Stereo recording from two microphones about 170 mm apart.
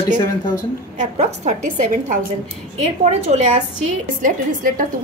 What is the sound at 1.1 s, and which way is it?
A woman's voice, 45° right (ahead or behind).